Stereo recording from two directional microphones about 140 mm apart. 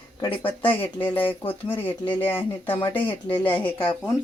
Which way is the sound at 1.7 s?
15° left (ahead or behind).